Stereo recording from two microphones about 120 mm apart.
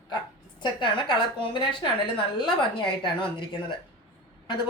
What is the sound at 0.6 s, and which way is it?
A woman's voice, 45° left (ahead or behind).